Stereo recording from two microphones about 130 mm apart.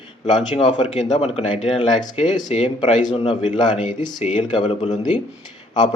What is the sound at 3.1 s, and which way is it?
Speech, 40° left (ahead or behind).